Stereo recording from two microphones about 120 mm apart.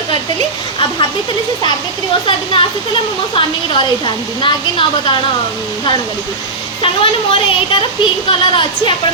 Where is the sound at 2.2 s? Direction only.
45° left (ahead or behind).